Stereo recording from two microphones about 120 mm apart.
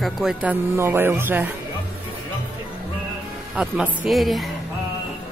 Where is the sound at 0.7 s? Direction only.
20° right (ahead or behind).